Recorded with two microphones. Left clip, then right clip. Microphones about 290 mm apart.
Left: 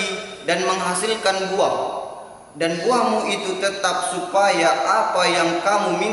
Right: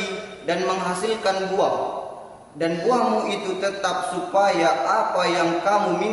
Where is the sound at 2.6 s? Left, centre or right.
Centre.